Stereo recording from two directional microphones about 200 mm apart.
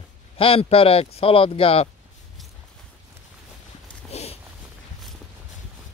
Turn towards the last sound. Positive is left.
turn(degrees=30)  # may be behind; listen again after turning